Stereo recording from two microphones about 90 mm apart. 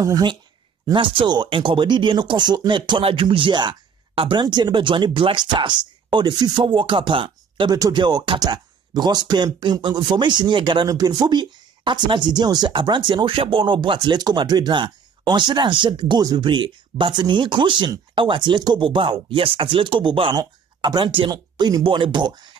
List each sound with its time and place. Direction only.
0.0 s speech: 50° right (ahead or behind)
0.9 s speech: 65° right (ahead or behind)
4.4 s speech: 55° right (ahead or behind)
10.9 s speech: 45° right (ahead or behind); by 21.3 s 65° right (ahead or behind)
21.3 s speech: 50° right (ahead or behind)